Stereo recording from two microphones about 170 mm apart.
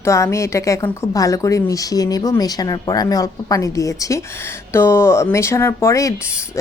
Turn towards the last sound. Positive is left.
turn(degrees=20)  # may be behind; listen again after turning